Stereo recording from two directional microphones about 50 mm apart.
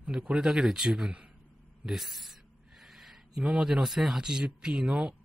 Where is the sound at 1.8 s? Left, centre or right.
Centre.